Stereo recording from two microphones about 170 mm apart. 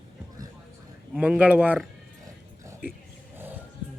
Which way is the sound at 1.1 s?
10° right (ahead or behind).